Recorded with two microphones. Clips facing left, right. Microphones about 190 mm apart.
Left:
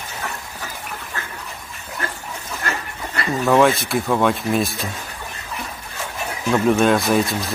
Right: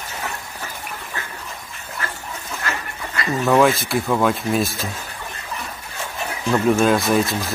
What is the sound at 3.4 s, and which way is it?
Speech, centre (ahead or behind).